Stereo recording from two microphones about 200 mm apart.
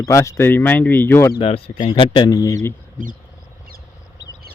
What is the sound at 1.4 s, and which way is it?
Speech, 30° left (ahead or behind).